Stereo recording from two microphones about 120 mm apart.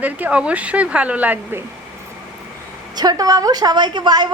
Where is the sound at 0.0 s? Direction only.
10° right (ahead or behind).